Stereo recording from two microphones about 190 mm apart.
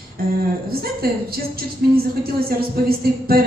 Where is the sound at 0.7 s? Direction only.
55° right (ahead or behind).